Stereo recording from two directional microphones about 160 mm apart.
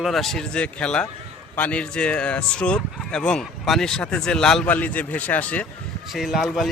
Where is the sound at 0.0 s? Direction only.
Centre (ahead or behind).